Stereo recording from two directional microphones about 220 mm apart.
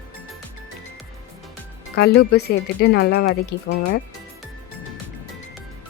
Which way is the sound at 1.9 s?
45° left (ahead or behind).